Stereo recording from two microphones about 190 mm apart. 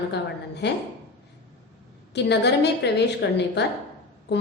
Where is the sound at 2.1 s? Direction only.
60° left (ahead or behind).